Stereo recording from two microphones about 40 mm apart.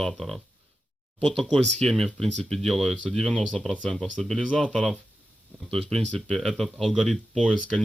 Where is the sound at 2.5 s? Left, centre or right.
Centre.